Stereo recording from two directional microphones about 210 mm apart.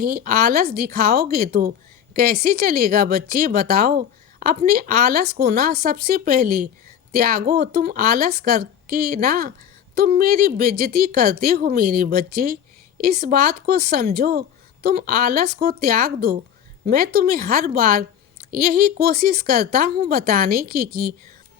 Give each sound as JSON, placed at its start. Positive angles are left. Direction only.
{"t": 0.0, "sound": "speech", "side_deg": -45}